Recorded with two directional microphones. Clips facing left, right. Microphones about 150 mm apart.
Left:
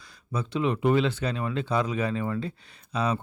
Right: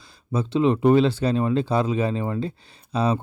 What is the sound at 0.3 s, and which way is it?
A man's voice, 30° right (ahead or behind).